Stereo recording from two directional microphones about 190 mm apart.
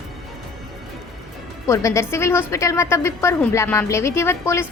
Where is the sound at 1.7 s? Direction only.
15° left (ahead or behind).